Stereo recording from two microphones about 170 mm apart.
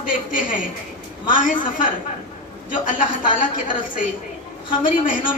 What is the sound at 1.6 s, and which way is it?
A woman's voice, 50° left (ahead or behind).